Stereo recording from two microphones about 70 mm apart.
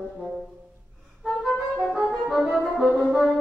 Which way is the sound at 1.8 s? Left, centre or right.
Centre.